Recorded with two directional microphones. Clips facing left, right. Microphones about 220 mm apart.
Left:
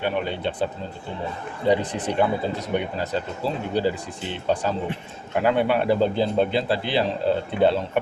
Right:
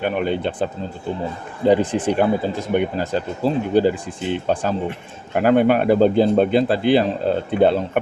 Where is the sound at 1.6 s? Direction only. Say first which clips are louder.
Right 6 dB; 50° right (ahead or behind).